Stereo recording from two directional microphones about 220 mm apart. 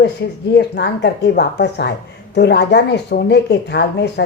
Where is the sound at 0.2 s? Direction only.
50° left (ahead or behind).